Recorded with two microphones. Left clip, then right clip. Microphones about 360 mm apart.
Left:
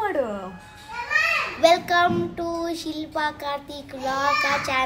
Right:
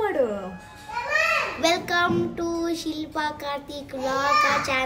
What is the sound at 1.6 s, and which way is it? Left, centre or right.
Child singing, centre.